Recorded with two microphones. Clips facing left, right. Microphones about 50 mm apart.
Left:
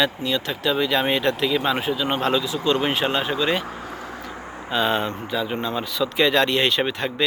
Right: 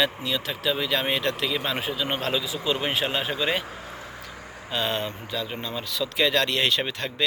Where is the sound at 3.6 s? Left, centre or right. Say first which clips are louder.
Left 5 dB; left.